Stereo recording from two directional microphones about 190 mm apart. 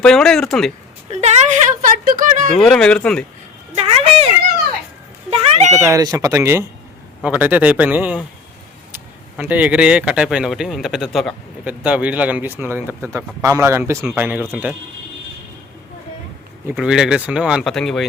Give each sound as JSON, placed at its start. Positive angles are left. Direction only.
{"t": 0.0, "sound": "speech", "side_deg": 5}
{"t": 1.1, "sound": "speech", "side_deg": -35}
{"t": 2.6, "sound": "speech", "side_deg": 5}
{"t": 3.8, "sound": "a sound", "side_deg": -30}
{"t": 5.3, "sound": "meow", "side_deg": -35}
{"t": 5.7, "sound": "speech", "side_deg": -15}
{"t": 9.4, "sound": "speech", "side_deg": -10}
{"t": 16.7, "sound": "speech", "side_deg": -5}